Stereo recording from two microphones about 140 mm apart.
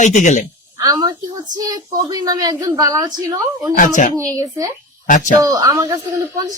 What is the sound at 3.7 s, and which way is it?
Speech, 70° left (ahead or behind).